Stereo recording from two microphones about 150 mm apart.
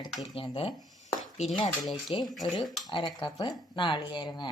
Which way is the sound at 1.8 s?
Centre (ahead or behind).